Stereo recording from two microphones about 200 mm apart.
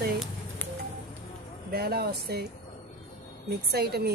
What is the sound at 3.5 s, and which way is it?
Speech, 50° right (ahead or behind).